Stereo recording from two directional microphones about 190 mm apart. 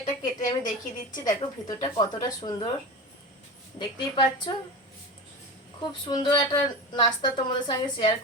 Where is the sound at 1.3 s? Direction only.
20° left (ahead or behind).